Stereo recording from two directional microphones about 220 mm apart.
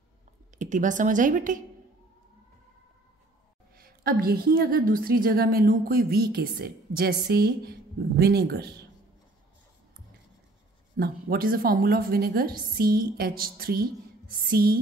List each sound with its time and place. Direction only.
0.6 s a woman's voice: 35° right (ahead or behind)
3.7 s a woman's voice: 40° right (ahead or behind)
11.0 s a woman's voice: 40° right (ahead or behind)